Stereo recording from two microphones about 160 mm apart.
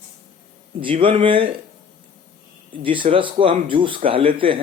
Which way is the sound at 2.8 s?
30° right (ahead or behind).